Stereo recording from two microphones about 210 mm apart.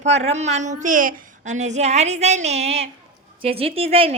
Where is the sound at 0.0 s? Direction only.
30° right (ahead or behind).